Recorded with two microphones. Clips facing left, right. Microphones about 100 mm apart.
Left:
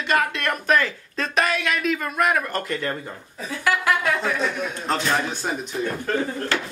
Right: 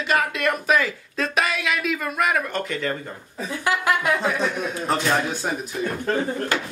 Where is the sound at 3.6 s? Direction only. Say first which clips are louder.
Even; 20° right (ahead or behind).